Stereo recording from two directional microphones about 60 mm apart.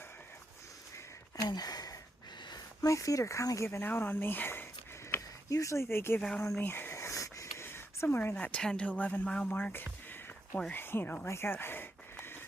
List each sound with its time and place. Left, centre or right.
1.4 s a sound: left
2.8 s speech: left
3.7 s speech: left
5.1 s a sound: left
5.5 s speech: left
6.9 s a sound: left
8.0 s speech: left
8.4 s speech: left
8.6 s a woman's voice: centre
8.9 s speech: left
10.7 s speech: left
11.3 s speech: left
11.5 s a sound: left